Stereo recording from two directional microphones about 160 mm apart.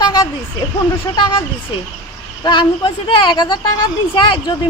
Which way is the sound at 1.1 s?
30° left (ahead or behind).